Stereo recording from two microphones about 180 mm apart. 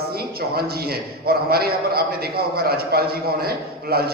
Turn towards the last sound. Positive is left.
turn(degrees=-60)  # may be behind; listen again after turning